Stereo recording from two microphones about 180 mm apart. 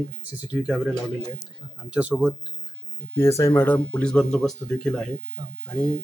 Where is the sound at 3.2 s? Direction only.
15° left (ahead or behind).